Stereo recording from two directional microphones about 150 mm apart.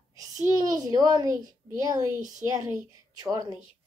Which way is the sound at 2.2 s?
55° right (ahead or behind).